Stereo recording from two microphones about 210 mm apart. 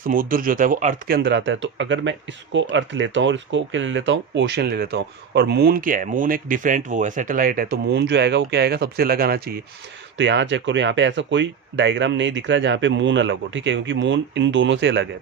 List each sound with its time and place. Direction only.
0.0 s speech: 40° right (ahead or behind)
10.2 s speech: 60° right (ahead or behind)